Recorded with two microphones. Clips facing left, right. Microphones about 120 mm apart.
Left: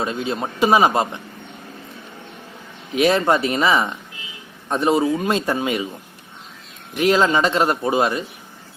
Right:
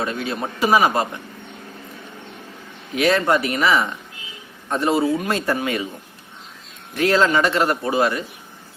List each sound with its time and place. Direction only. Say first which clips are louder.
0.0 s a man's voice: left 1 dB; 20° left (ahead or behind)
2.9 s a man's voice: left 1 dB; 20° left (ahead or behind)
6.9 s a man's voice: left 1 dB; 15° left (ahead or behind)